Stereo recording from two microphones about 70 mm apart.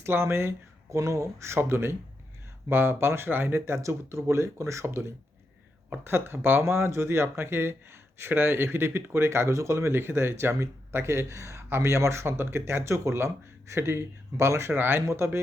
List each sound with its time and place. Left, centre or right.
0.0 s speech: right